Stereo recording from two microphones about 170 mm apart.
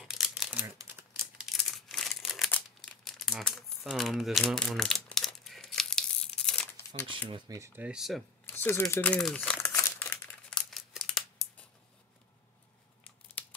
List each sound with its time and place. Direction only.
0.0 s crumpling: centre (ahead or behind)
1.2 s crumpling: centre (ahead or behind)
7.1 s speech: 30° right (ahead or behind); by 8.2 s 5° right (ahead or behind)
8.5 s speech: 15° left (ahead or behind)
8.8 s crumpling: 10° left (ahead or behind)
13.3 s crumpling: 10° left (ahead or behind)